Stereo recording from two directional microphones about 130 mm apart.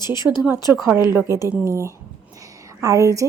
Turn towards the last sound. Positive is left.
turn(degrees=-25)  # may be behind; listen again after turning